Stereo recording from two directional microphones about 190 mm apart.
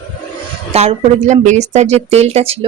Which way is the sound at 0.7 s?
35° right (ahead or behind).